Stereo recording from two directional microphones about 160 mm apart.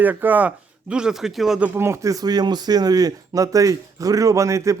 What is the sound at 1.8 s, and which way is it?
Speech, 15° right (ahead or behind).